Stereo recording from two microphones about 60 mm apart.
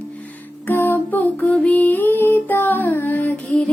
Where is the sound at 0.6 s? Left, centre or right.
Left.